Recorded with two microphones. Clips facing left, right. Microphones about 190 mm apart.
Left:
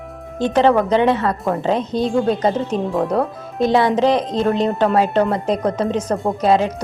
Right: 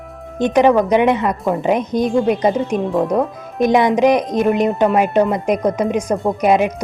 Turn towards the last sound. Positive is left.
turn(degrees=-15)  # may be behind; listen again after turning